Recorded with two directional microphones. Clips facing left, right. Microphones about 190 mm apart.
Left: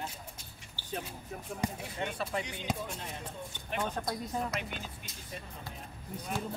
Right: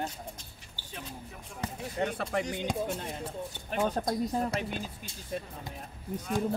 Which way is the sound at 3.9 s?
40° right (ahead or behind).